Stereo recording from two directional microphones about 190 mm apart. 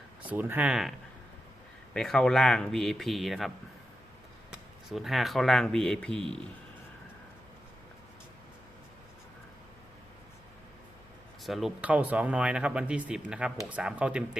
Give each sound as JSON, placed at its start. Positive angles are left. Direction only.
{"t": 0.2, "sound": "speech", "side_deg": -10}
{"t": 4.5, "sound": "speech", "side_deg": 0}
{"t": 11.4, "sound": "speech", "side_deg": 0}